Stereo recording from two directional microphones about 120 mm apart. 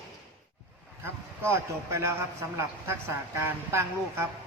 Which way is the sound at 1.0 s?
20° right (ahead or behind).